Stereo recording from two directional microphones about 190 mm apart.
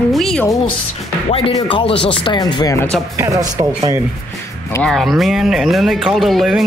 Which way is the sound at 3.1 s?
15° right (ahead or behind).